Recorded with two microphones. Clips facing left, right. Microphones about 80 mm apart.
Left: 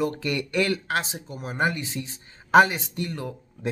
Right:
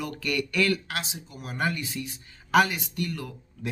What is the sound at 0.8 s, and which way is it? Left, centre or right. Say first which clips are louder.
Speech: left 7 dB; left.